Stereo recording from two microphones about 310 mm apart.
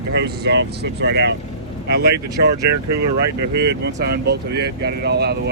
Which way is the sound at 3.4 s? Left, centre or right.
Right.